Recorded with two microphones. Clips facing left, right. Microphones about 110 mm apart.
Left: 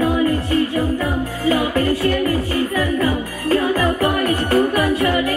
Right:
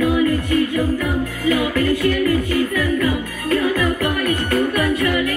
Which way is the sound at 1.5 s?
30° left (ahead or behind).